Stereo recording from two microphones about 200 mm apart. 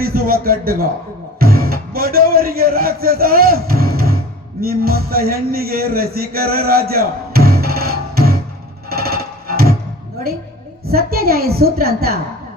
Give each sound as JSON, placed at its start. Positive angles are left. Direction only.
{"t": 0.0, "sound": "a woman's voice", "side_deg": -50}
{"t": 1.4, "sound": "music", "side_deg": -50}
{"t": 4.6, "sound": "speech", "side_deg": -50}
{"t": 8.9, "sound": "music", "side_deg": -50}
{"t": 10.8, "sound": "a woman's voice", "side_deg": -50}